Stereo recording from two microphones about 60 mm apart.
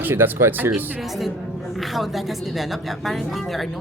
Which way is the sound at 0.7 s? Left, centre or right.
Centre.